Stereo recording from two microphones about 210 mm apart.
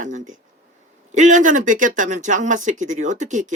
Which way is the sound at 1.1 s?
35° right (ahead or behind).